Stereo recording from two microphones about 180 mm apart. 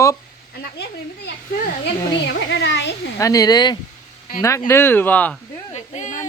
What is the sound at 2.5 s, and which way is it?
Speech, 75° left (ahead or behind).